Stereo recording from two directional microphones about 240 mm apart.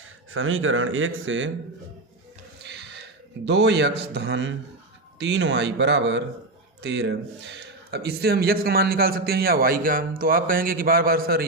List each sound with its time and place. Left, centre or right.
0.3 s speech: right
2.6 s a sound: right
3.4 s a man's voice: right